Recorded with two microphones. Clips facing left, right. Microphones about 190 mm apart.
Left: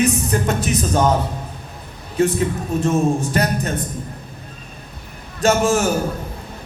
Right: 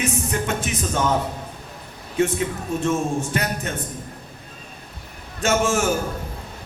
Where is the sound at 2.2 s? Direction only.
35° left (ahead or behind).